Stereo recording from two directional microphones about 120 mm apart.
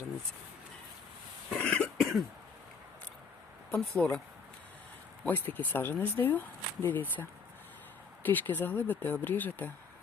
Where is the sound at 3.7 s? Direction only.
5° left (ahead or behind).